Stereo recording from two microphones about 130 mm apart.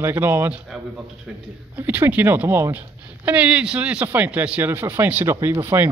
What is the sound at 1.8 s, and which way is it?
A woman's voice, 15° right (ahead or behind).